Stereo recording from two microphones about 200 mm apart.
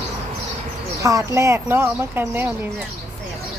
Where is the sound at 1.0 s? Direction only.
15° right (ahead or behind).